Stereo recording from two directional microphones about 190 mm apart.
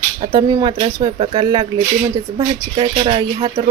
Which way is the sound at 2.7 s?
30° right (ahead or behind).